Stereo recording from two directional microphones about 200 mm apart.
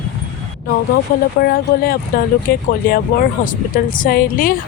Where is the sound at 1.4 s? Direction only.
50° left (ahead or behind).